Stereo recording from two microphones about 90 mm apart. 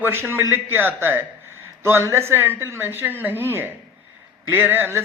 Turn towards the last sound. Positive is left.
turn(degrees=-20)  # may be behind; listen again after turning